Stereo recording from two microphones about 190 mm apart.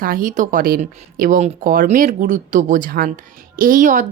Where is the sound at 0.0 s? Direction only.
45° right (ahead or behind).